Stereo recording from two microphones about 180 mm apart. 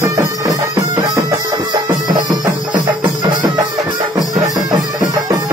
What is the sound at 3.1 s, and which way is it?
Music, 20° right (ahead or behind).